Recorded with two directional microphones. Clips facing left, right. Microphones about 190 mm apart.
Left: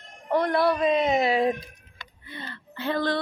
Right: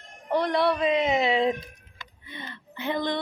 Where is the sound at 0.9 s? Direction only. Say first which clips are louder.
Left 1 dB; 20° right (ahead or behind).